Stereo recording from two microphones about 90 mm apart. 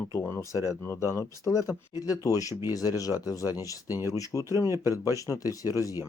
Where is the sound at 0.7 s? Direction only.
35° left (ahead or behind).